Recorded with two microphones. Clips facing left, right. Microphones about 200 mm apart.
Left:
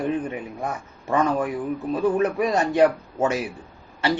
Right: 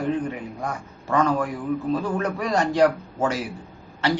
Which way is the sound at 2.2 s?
20° left (ahead or behind).